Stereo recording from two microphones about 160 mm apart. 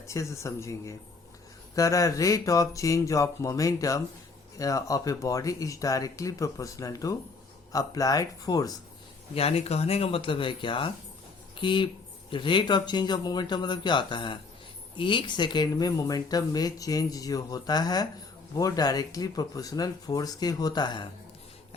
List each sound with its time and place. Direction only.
0.1 s speech: 20° left (ahead or behind)
9.3 s speech: 40° left (ahead or behind)